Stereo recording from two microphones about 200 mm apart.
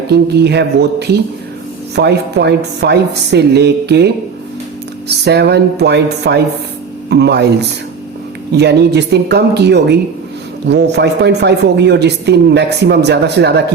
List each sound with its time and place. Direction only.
0.1 s speech: 55° right (ahead or behind)